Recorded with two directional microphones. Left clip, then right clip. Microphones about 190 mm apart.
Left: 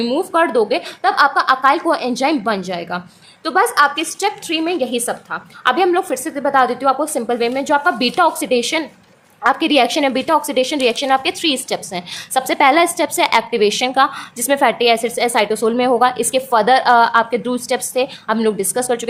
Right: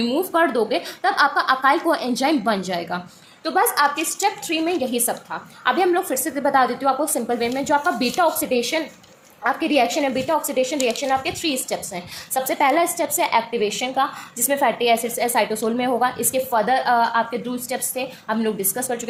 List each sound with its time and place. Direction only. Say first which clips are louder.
0.0 s a woman's voice: left 3 dB; 25° left (ahead or behind)
3.4 s a woman's voice: left 5 dB; 30° left (ahead or behind)